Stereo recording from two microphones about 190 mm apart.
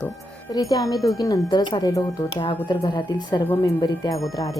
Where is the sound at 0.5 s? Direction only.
20° left (ahead or behind).